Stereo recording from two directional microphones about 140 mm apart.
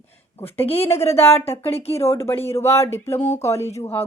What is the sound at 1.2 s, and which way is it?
Speech, 15° left (ahead or behind).